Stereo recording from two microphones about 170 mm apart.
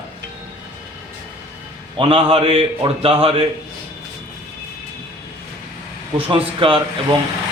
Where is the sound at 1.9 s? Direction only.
30° right (ahead or behind).